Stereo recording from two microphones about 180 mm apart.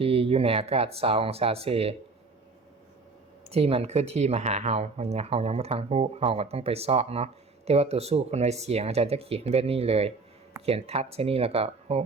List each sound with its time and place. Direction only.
0.0 s speech: 30° right (ahead or behind)
3.5 s speech: 35° right (ahead or behind)